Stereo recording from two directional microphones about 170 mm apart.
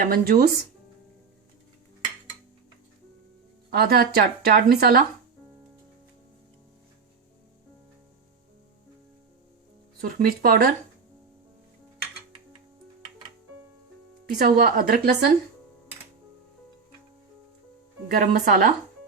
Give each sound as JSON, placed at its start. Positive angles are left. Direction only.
{"t": 0.0, "sound": "speech", "side_deg": -60}
{"t": 3.7, "sound": "speech", "side_deg": -65}
{"t": 10.0, "sound": "speech", "side_deg": -60}
{"t": 14.3, "sound": "speech", "side_deg": -65}
{"t": 18.1, "sound": "speech", "side_deg": -65}